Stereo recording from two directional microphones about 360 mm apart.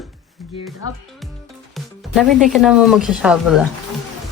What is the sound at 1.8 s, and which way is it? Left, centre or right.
Music, centre.